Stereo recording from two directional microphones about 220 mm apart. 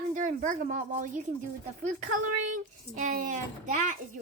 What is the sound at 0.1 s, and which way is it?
Speech, 35° right (ahead or behind).